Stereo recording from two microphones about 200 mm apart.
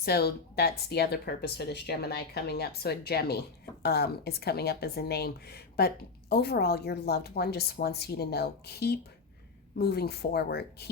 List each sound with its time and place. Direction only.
0.0 s speech: 50° left (ahead or behind)